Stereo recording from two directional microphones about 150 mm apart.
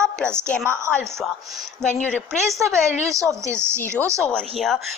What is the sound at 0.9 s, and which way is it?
Speech, 5° left (ahead or behind).